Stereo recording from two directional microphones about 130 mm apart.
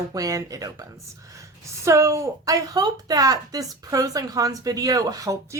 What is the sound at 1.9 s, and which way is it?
Speech, 20° right (ahead or behind).